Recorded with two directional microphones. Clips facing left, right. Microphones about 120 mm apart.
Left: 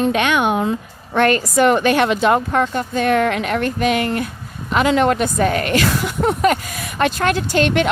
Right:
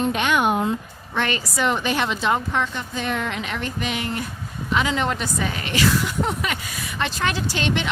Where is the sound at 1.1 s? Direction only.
50° left (ahead or behind).